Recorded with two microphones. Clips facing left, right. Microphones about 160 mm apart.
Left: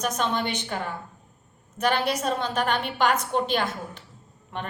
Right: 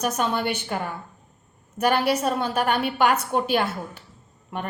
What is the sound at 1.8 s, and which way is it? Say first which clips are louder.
A woman's voice: right 3 dB; 10° right (ahead or behind).